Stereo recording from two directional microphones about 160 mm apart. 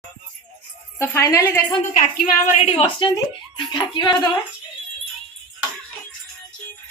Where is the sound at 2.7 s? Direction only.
35° left (ahead or behind).